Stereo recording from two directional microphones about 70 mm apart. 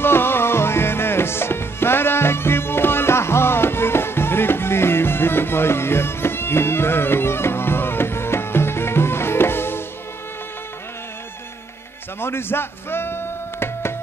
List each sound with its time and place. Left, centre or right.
0.0 s music: left
12.2 s music: left